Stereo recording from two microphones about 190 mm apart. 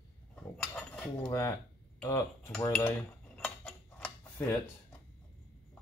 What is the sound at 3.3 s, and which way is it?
Cutlery, 5° left (ahead or behind).